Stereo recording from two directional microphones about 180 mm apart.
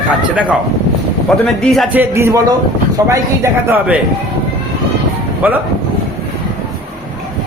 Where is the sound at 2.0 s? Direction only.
15° right (ahead or behind).